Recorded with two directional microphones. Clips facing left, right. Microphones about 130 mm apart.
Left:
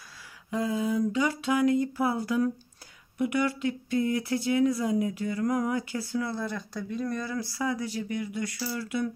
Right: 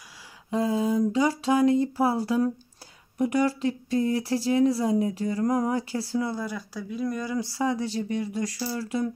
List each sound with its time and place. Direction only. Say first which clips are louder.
0.5 s speech: right 3 dB; 30° right (ahead or behind)
6.2 s speech: right 2 dB; 10° right (ahead or behind)
7.5 s speech: right 4 dB; 30° right (ahead or behind)